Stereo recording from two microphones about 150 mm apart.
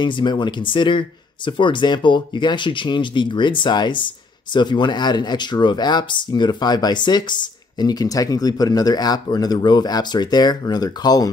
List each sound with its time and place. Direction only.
0.0 s speech: 30° left (ahead or behind)